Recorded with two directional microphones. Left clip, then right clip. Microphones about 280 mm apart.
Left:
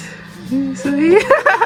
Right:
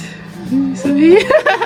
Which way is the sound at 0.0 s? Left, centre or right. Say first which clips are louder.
Right 2 dB; left.